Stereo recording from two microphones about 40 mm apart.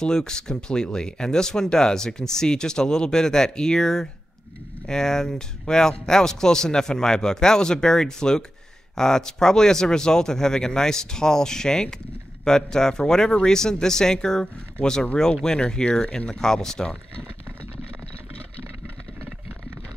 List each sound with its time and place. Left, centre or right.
0.0 s speech: centre